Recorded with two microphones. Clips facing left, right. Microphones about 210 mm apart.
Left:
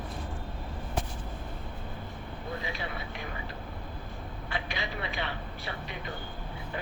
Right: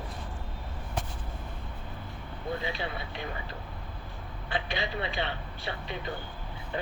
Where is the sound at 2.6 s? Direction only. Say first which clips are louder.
Right 3 dB; 30° right (ahead or behind).